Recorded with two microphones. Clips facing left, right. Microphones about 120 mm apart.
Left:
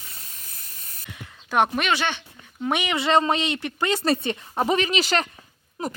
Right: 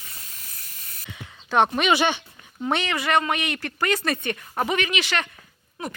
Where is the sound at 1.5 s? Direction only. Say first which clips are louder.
Right 1 dB; 5° left (ahead or behind).